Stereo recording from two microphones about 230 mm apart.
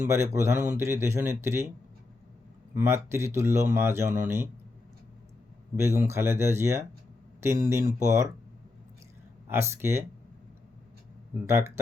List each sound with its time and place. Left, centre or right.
0.1 s speech: centre
2.7 s speech: centre
5.7 s speech: centre
9.5 s speech: centre